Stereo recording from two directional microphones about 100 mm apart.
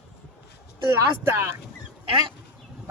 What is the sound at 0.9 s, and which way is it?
Speech, 25° right (ahead or behind).